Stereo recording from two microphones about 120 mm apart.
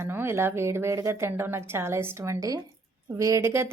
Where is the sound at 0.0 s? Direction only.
20° right (ahead or behind).